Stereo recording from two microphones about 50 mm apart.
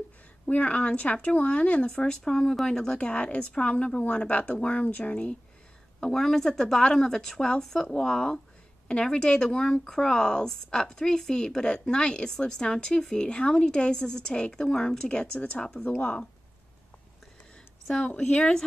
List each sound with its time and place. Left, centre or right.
0.5 s speech: left
4.8 s speech: left
5.9 s speech: centre
18.0 s speech: left